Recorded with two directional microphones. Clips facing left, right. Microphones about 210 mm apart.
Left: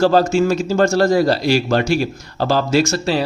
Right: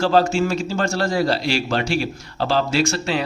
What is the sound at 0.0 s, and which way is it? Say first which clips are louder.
A man's voice: left 4 dB; 40° left (ahead or behind).